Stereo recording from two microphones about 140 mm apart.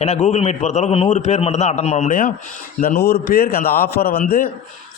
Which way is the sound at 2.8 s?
90° left.